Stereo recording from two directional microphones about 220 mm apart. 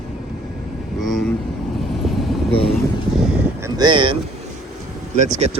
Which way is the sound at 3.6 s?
20° right (ahead or behind).